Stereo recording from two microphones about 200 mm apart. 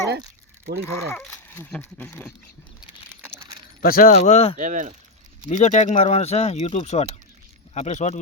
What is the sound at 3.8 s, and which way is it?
Speech, 45° left (ahead or behind).